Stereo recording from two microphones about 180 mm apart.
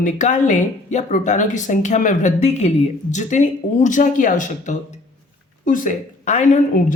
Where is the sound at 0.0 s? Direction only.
45° left (ahead or behind).